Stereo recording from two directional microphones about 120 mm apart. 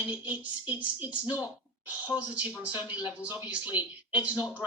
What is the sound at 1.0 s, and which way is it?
Speech, 10° right (ahead or behind).